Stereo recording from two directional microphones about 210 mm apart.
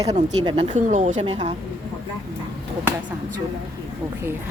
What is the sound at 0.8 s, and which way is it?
Speech, 35° right (ahead or behind).